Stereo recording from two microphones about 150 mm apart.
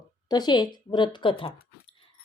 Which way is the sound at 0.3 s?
30° left (ahead or behind).